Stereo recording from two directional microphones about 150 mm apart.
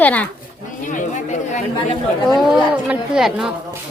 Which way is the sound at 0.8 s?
60° left (ahead or behind).